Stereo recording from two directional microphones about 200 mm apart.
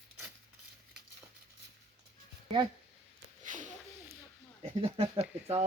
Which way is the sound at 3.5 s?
40° right (ahead or behind).